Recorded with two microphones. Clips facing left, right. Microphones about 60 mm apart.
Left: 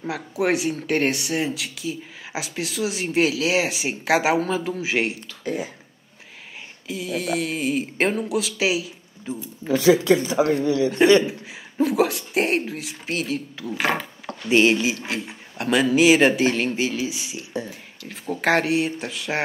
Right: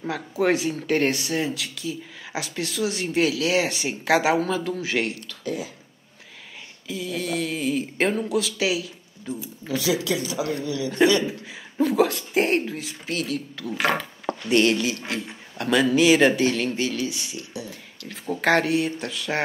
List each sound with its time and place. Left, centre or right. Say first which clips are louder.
0.0 s speech: even; centre
5.4 s speech: left 2 dB; left
6.9 s speech: left 2 dB; centre
9.7 s speech: left 8 dB; left
11.8 s speech: even; centre